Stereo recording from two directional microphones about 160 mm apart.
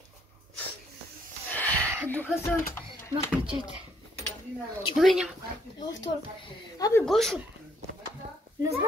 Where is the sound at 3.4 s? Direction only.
30° right (ahead or behind).